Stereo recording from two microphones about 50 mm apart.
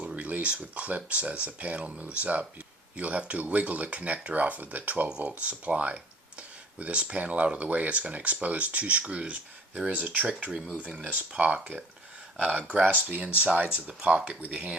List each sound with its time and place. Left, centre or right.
0.2 s a sound: right
0.5 s speech: right
14.4 s speech: right